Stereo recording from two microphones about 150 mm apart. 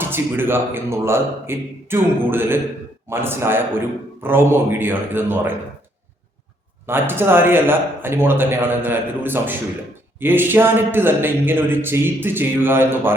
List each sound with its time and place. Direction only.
0.0 s speech: 15° right (ahead or behind)
6.8 s speech: 15° right (ahead or behind)